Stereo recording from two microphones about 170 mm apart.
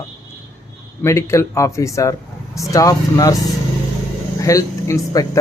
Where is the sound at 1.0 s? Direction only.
15° left (ahead or behind).